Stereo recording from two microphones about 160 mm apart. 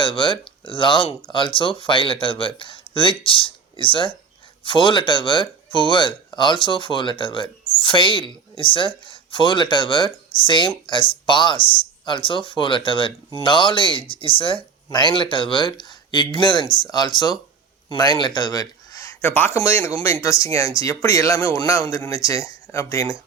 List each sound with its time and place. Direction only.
0.0 s a man's voice: 30° left (ahead or behind)